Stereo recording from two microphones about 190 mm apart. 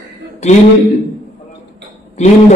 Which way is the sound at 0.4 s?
35° left (ahead or behind).